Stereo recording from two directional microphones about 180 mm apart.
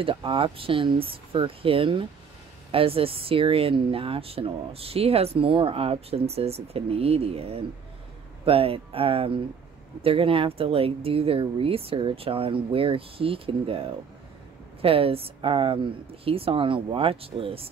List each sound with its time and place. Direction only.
0.0 s speech: 30° right (ahead or behind)
14.8 s speech: 30° right (ahead or behind)